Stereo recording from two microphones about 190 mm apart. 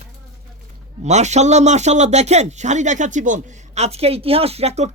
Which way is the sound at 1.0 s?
35° right (ahead or behind).